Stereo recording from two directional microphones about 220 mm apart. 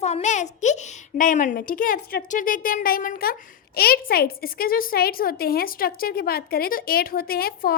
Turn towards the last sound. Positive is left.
turn(degrees=45)  # may be behind; listen again after turning